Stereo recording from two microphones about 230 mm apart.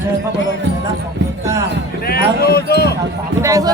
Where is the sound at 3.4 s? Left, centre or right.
Centre.